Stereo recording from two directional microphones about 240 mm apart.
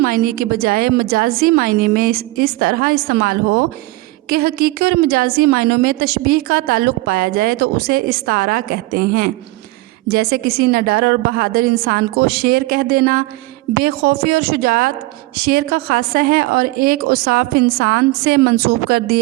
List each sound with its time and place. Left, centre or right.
0.0 s a woman's voice: right